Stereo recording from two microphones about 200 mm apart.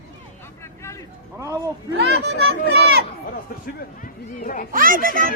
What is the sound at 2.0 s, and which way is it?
A child's voice, 55° right (ahead or behind).